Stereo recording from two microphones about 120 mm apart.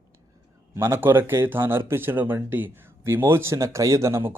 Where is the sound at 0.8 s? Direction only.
20° right (ahead or behind).